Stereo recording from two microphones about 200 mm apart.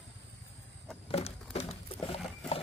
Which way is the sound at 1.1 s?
30° left (ahead or behind).